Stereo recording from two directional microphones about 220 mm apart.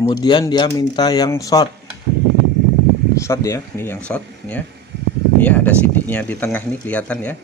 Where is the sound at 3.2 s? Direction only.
15° left (ahead or behind).